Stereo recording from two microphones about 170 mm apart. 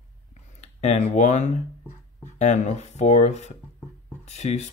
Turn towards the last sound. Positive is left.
turn(degrees=40)  # may be behind; listen again after turning